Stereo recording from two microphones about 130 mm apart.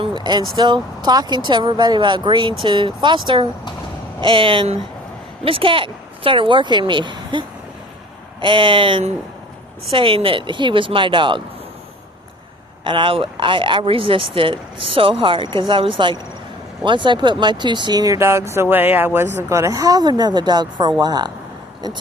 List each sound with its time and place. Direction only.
0.0 s a woman's voice: 35° right (ahead or behind)
12.8 s speech: 40° right (ahead or behind)